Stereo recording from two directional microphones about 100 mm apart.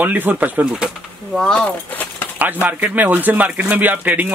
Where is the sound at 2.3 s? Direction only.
15° right (ahead or behind).